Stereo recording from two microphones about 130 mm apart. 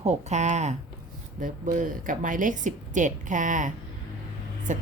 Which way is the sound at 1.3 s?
90° right.